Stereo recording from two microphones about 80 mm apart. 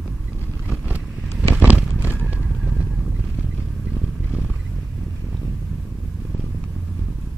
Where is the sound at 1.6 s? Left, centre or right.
Centre.